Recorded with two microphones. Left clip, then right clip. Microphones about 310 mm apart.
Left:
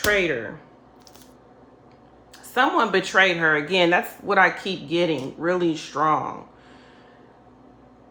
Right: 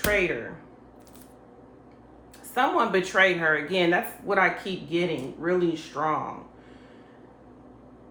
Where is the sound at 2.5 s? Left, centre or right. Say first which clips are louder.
Left 3 dB; left.